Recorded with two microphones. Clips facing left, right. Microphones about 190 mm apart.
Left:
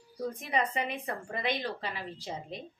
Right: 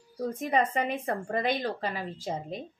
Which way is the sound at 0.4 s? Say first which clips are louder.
Right 6 dB; 45° right (ahead or behind).